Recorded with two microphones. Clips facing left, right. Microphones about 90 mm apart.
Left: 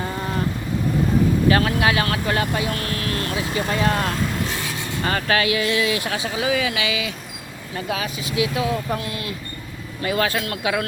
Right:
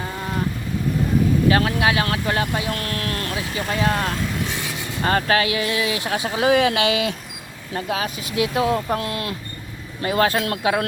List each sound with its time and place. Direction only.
1.5 s speech: 20° right (ahead or behind)
3.7 s vehicle: 5° right (ahead or behind)
5.0 s speech: 30° right (ahead or behind)
6.1 s speech: 45° right (ahead or behind)
6.5 s speech: 55° right (ahead or behind)
7.8 s speech: 40° right (ahead or behind); by 9.3 s 55° right (ahead or behind)
10.0 s speech: 35° right (ahead or behind)